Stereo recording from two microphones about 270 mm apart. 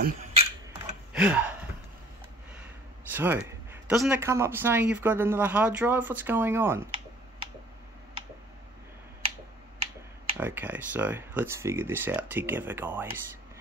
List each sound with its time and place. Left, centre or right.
0.0 s a sound: right
1.1 s gasp: centre
3.1 s speech: centre
10.3 s speech: centre